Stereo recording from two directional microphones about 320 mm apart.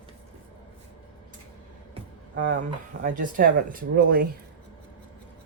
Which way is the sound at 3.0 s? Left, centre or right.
Right.